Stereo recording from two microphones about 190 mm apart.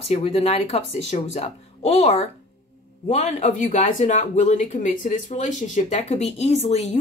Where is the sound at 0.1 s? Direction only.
30° left (ahead or behind).